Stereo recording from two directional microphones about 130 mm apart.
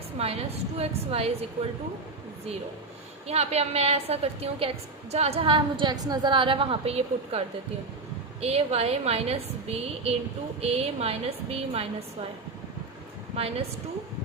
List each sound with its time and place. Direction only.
0.2 s a woman's voice: 50° right (ahead or behind)
3.2 s a woman's voice: 55° right (ahead or behind)
13.3 s a woman's voice: 50° right (ahead or behind)